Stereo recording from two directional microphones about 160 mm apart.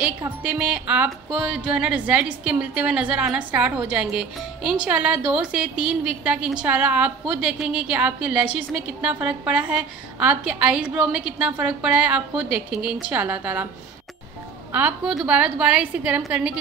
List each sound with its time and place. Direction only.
0.4 s a woman's voice: 5° right (ahead or behind)
14.7 s a woman's voice: 10° right (ahead or behind)